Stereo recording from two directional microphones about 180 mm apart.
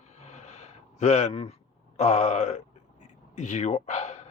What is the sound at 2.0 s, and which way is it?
Speech, 40° left (ahead or behind).